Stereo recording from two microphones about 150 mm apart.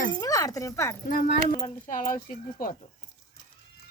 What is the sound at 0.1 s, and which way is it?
Speech, 20° left (ahead or behind).